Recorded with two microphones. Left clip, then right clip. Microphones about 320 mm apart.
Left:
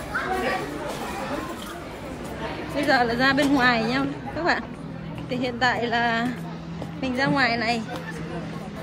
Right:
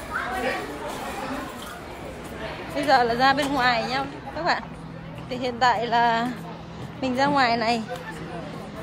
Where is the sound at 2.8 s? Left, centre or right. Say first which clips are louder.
Right 2 dB; centre.